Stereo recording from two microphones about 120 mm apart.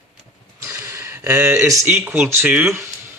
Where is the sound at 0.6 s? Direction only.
25° right (ahead or behind).